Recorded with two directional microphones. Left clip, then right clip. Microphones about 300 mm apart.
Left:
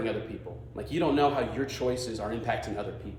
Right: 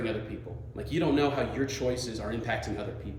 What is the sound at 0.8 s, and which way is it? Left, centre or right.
Speech, centre.